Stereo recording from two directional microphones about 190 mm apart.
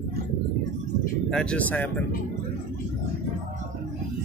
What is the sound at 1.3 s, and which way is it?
Speech, 5° left (ahead or behind).